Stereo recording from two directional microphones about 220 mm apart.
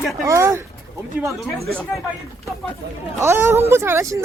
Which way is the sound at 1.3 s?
Centre (ahead or behind).